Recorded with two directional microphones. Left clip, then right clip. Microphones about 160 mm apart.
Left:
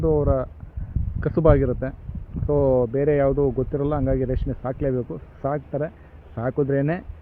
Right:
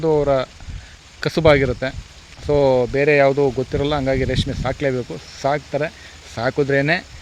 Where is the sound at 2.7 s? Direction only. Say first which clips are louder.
Right 4 dB; 15° right (ahead or behind).